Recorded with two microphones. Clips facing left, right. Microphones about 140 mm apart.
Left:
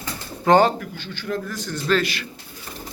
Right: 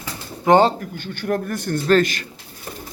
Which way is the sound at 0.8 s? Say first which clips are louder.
Right 4 dB; 50° right (ahead or behind).